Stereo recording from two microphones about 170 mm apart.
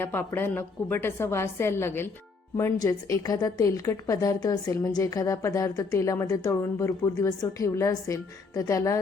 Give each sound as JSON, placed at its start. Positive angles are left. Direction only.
{"t": 0.0, "sound": "a woman's voice", "side_deg": 10}